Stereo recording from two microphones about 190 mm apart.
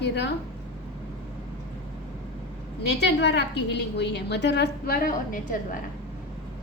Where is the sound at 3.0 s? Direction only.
65° left (ahead or behind); by 5.4 s 45° left (ahead or behind).